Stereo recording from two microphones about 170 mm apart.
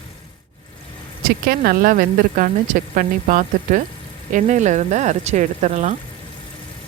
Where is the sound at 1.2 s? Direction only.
60° right (ahead or behind); by 5.9 s 45° right (ahead or behind).